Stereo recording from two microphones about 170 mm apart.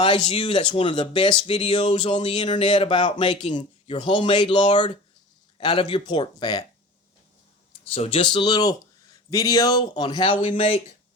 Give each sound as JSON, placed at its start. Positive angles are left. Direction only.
{"t": 0.3, "sound": "speech", "side_deg": 35}
{"t": 7.9, "sound": "speech", "side_deg": 35}